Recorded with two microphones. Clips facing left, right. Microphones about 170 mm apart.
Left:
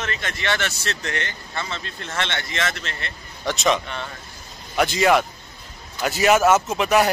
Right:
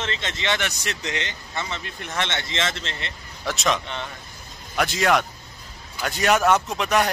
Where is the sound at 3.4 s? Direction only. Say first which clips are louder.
Left 3 dB; centre (ahead or behind).